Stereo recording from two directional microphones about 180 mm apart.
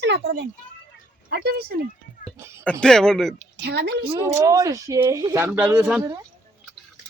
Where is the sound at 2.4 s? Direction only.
15° right (ahead or behind).